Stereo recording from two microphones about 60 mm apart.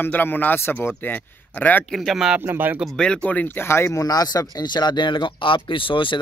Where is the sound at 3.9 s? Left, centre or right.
Left.